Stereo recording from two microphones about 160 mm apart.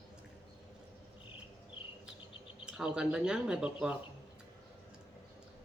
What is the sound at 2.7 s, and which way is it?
Speech, 5° right (ahead or behind).